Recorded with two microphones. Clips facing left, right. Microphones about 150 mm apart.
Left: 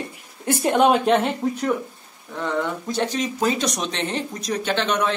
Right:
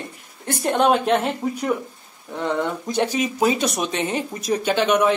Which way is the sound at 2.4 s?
15° right (ahead or behind).